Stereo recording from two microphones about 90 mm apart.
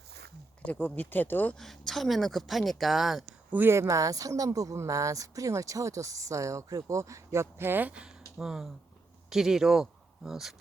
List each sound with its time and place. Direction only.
0.6 s speech: 15° left (ahead or behind)
1.5 s speech: 5° left (ahead or behind)
3.5 s speech: 25° right (ahead or behind)
8.4 s speech: 5° right (ahead or behind)